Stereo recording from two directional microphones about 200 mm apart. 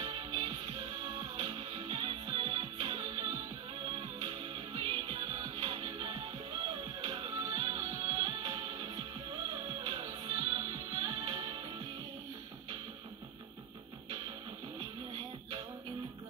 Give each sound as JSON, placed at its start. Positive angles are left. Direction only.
{"t": 0.0, "sound": "music", "side_deg": -25}
{"t": 14.8, "sound": "music", "side_deg": -25}